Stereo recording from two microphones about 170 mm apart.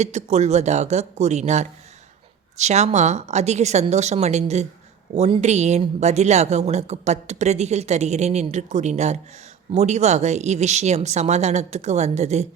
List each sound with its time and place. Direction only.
0.0 s speech: 40° right (ahead or behind)